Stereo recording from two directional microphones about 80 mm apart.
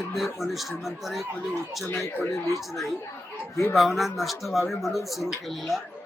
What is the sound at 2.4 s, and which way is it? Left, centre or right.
Speech, left.